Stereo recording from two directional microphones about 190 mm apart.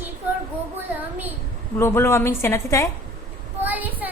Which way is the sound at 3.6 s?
10° right (ahead or behind).